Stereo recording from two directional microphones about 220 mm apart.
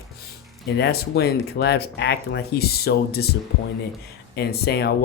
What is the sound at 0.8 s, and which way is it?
Speech, 45° left (ahead or behind).